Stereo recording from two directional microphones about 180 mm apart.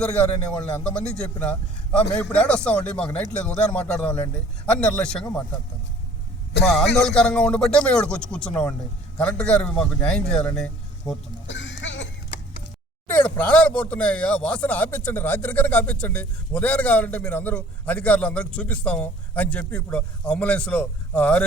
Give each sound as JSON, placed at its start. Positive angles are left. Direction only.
{"t": 0.0, "sound": "speech", "side_deg": 5}
{"t": 6.7, "sound": "a man's voice", "side_deg": 0}
{"t": 11.4, "sound": "a sound", "side_deg": 90}
{"t": 13.1, "sound": "speech", "side_deg": 10}